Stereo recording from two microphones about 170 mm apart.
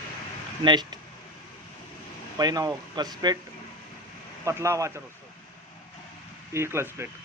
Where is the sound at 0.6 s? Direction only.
25° right (ahead or behind).